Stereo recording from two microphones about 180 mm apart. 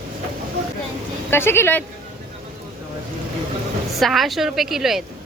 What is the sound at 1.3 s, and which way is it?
Speech, 15° left (ahead or behind).